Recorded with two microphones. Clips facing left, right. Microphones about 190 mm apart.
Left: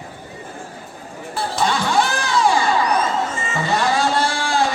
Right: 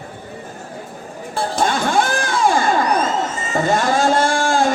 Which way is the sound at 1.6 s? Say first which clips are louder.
Right 1 dB; 50° right (ahead or behind).